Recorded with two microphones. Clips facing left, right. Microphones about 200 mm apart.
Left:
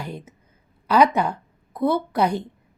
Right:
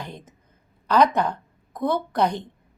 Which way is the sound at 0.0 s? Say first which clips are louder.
Left 4 dB; 10° left (ahead or behind).